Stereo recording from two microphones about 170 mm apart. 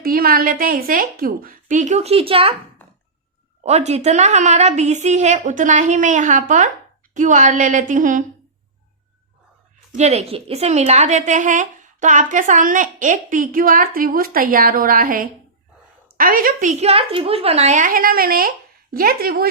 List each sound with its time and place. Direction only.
0.0 s a woman's voice: 60° right (ahead or behind); by 2.6 s 35° right (ahead or behind)
3.6 s a woman's voice: 40° right (ahead or behind)
9.9 s a woman's voice: 40° right (ahead or behind); by 19.5 s 60° right (ahead or behind)